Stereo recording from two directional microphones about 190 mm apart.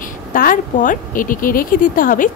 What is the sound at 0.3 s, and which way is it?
Speech, 45° left (ahead or behind).